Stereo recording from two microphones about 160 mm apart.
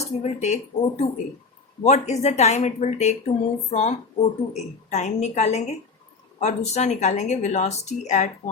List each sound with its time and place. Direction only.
0.0 s speech: 45° left (ahead or behind)